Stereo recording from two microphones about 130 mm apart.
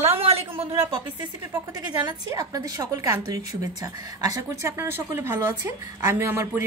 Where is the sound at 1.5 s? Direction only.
30° right (ahead or behind).